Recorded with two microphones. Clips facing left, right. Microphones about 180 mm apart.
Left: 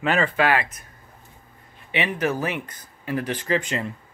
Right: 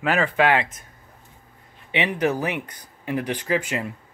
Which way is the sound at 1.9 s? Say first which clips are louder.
Right 2 dB; 15° right (ahead or behind).